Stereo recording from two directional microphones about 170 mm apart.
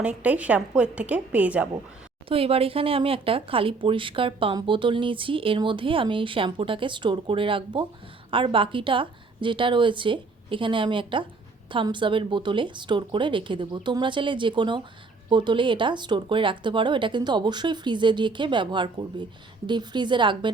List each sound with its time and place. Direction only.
0.0 s a woman's voice: 10° right (ahead or behind)
2.3 s speech: 35° right (ahead or behind)